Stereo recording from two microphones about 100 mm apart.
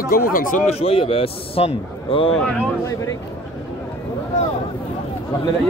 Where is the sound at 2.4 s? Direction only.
10° left (ahead or behind).